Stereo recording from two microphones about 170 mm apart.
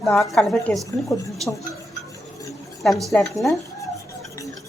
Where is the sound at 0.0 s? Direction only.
Centre (ahead or behind).